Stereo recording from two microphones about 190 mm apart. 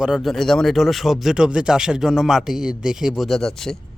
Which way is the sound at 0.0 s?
Centre (ahead or behind).